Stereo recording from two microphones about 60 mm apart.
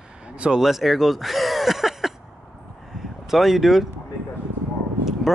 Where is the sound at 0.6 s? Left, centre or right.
Centre.